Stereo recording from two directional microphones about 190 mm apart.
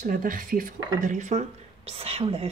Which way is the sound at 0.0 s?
45° right (ahead or behind).